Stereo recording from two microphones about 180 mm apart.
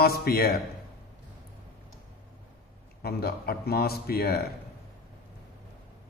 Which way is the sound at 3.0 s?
60° left (ahead or behind).